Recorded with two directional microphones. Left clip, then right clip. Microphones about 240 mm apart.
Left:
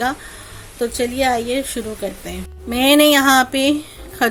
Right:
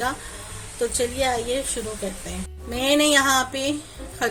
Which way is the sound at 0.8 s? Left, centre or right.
Left.